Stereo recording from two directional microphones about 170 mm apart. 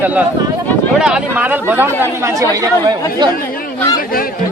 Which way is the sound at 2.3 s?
20° right (ahead or behind).